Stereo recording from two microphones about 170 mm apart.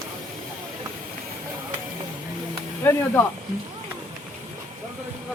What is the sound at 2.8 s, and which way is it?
Speech, 15° left (ahead or behind).